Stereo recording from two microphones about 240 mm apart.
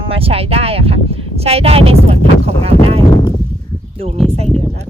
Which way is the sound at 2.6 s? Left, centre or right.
Right.